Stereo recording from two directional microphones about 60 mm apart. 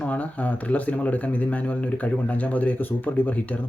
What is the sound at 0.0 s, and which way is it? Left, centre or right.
Speech, left.